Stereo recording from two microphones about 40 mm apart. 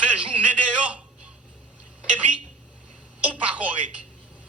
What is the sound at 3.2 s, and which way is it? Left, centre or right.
Speech, right.